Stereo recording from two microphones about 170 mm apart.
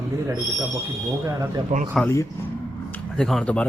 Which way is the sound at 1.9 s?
5° left (ahead or behind).